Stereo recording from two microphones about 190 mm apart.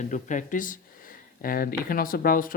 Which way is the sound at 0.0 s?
40° left (ahead or behind).